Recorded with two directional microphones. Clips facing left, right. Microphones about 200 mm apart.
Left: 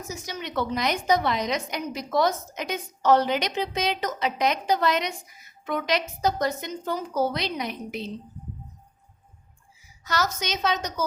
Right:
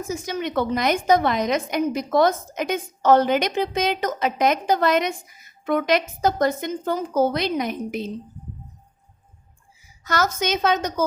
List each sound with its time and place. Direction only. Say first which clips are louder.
0.0 s a woman's voice: right 8 dB; 50° right (ahead or behind)
10.0 s a woman's voice: right 5 dB; 50° right (ahead or behind)